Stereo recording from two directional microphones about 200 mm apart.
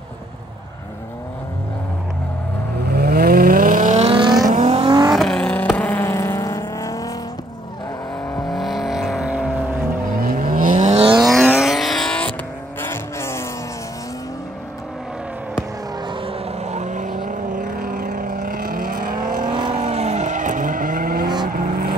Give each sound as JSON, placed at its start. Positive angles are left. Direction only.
{"t": 2.8, "sound": "vehicle", "side_deg": -50}
{"t": 4.5, "sound": "vehicle", "side_deg": -35}
{"t": 4.7, "sound": "vehicle", "side_deg": -20}
{"t": 5.1, "sound": "vehicle", "side_deg": 0}
{"t": 8.3, "sound": "vehicle", "side_deg": 0}
{"t": 10.1, "sound": "vehicle", "side_deg": -45}
{"t": 11.2, "sound": "vehicle", "side_deg": 0}
{"t": 16.1, "sound": "vehicle", "side_deg": -25}
{"t": 19.4, "sound": "vehicle", "side_deg": -20}